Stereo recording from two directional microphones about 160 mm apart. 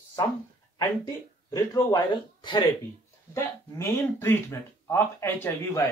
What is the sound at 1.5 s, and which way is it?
Speech, 25° left (ahead or behind).